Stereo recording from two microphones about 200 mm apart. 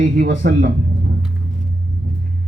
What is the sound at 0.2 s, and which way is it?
Speech, 45° right (ahead or behind).